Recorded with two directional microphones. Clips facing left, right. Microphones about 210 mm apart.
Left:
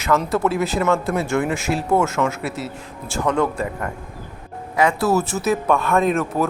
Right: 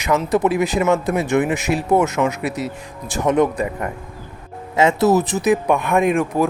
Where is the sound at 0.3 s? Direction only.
15° right (ahead or behind).